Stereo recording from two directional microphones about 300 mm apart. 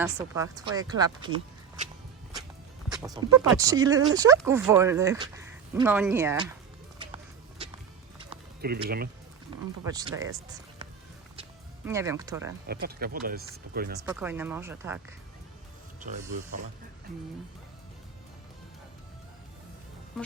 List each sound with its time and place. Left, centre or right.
0.0 s speech: centre
2.9 s speech: centre
7.0 s music: centre
8.6 s speech: right
9.5 s music: centre
9.8 s speech: centre
11.9 s speech: centre
12.6 s speech: right
14.0 s speech: centre